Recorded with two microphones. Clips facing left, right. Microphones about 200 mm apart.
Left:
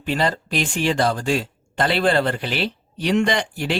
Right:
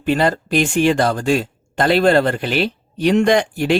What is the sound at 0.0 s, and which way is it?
Speech, 50° right (ahead or behind).